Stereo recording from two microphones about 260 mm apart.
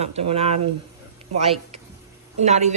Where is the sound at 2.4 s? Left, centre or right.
Right.